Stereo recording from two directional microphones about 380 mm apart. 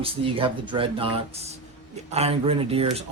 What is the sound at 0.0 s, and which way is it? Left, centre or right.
Speech, centre.